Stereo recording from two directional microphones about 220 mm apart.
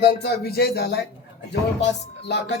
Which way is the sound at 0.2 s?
45° left (ahead or behind).